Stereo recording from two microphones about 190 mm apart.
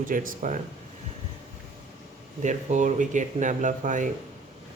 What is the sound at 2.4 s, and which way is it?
Speech, 40° right (ahead or behind).